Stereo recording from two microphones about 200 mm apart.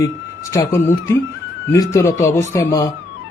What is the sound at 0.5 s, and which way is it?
Speech, 15° left (ahead or behind).